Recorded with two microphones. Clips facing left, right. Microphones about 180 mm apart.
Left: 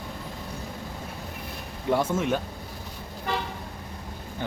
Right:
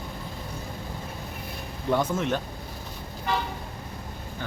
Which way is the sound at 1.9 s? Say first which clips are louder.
Left 1 dB; 5° left (ahead or behind).